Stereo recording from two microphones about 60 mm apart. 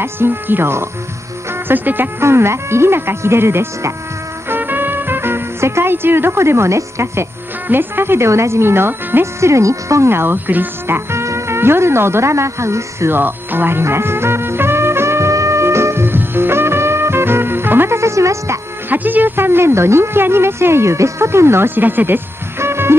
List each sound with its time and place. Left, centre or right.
0.0 s speech: right
4.5 s music: right
7.6 s speech: right
11.1 s speech: right
13.1 s music: right
18.9 s speech: right